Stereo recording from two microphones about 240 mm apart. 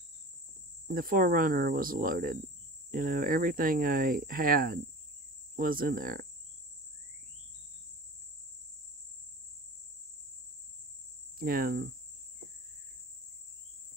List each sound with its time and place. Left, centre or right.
0.8 s speech: right
11.3 s speech: right